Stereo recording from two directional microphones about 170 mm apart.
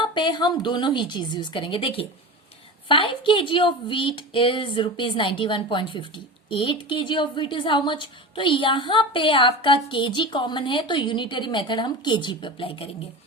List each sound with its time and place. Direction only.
0.0 s a woman's voice: 25° left (ahead or behind)